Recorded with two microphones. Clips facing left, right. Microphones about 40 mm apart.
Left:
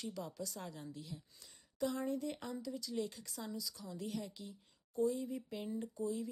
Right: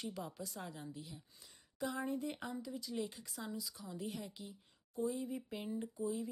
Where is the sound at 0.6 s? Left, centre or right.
Centre.